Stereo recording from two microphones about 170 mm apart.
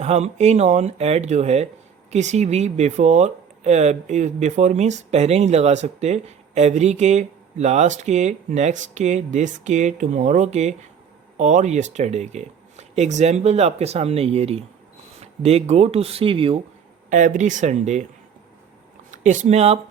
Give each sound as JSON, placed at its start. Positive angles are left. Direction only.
{"t": 0.0, "sound": "speech", "side_deg": -40}
{"t": 17.1, "sound": "speech", "side_deg": -45}
{"t": 19.1, "sound": "speech", "side_deg": -45}